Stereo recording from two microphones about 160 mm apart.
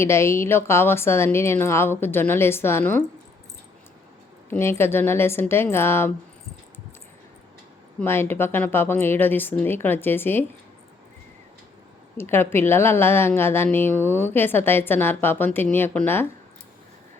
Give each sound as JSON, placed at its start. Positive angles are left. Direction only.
{"t": 0.0, "sound": "a woman's voice", "side_deg": 15}
{"t": 4.4, "sound": "a woman's voice", "side_deg": 15}
{"t": 7.9, "sound": "a woman's voice", "side_deg": 15}
{"t": 12.1, "sound": "a woman's voice", "side_deg": 15}